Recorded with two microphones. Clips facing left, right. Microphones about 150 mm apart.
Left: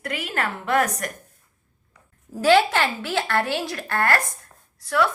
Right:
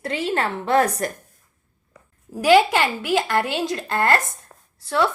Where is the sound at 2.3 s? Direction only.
15° right (ahead or behind).